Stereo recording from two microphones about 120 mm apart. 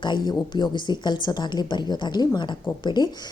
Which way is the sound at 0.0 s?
40° left (ahead or behind).